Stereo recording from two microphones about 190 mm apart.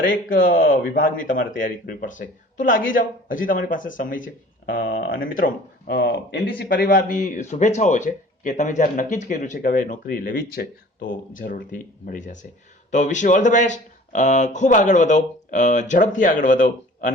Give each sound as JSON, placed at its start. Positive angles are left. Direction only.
{"t": 0.3, "sound": "speech", "side_deg": 50}